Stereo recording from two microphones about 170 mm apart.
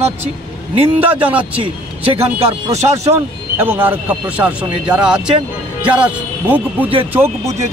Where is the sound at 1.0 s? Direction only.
10° right (ahead or behind).